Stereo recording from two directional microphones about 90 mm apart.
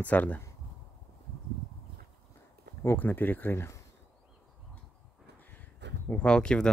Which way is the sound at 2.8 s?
20° left (ahead or behind).